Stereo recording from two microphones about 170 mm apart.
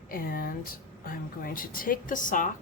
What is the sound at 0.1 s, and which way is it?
Speech, 60° left (ahead or behind).